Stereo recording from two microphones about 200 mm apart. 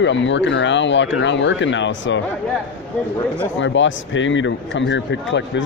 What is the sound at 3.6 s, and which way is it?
Speech, 70° left (ahead or behind).